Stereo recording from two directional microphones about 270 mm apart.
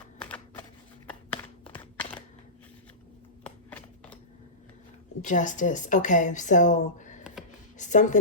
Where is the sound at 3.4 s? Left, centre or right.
Centre.